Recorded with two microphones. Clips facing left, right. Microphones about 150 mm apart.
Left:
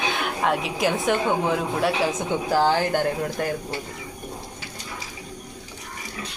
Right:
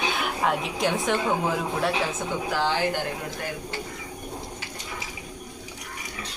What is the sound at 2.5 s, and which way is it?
Speech, 40° left (ahead or behind).